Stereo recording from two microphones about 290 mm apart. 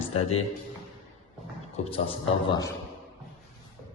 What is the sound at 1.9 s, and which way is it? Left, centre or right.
Speech, centre.